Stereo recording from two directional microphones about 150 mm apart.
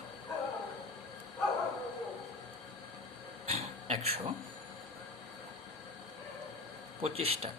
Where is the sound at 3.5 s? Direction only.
45° right (ahead or behind).